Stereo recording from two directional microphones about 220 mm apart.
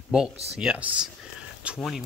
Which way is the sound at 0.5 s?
5° right (ahead or behind).